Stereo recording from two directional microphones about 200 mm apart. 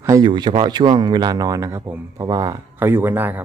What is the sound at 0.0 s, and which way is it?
Speech, 20° right (ahead or behind).